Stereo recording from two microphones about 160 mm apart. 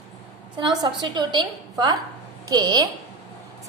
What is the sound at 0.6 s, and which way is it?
A woman's voice, 30° right (ahead or behind).